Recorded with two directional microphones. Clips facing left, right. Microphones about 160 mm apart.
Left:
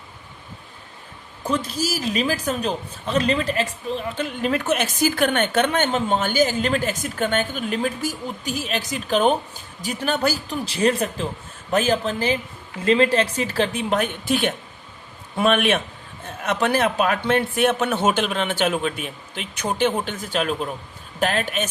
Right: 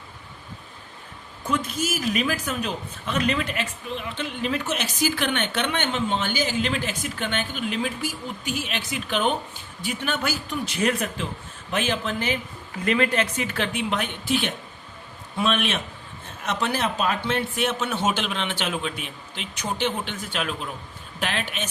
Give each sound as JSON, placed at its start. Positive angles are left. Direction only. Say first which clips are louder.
{"t": 1.5, "sound": "a man's voice", "louder": "left 2 dB", "side_deg": 35}